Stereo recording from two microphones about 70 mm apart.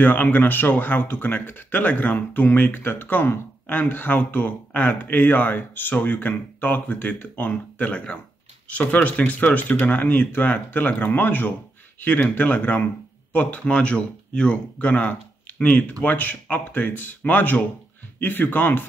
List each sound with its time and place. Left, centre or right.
0.0 s speech: left